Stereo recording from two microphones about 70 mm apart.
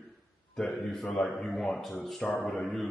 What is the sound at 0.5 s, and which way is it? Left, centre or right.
Speech, centre.